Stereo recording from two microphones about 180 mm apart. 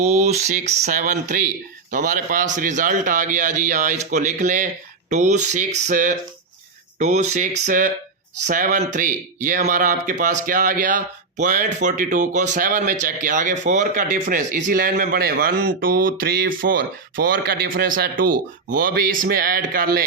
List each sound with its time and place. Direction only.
0.0 s speech: 40° right (ahead or behind); by 20.1 s 55° right (ahead or behind)